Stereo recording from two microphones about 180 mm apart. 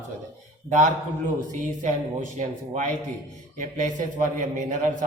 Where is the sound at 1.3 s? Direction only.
40° right (ahead or behind).